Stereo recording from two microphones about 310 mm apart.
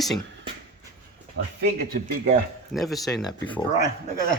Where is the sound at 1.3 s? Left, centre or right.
Right.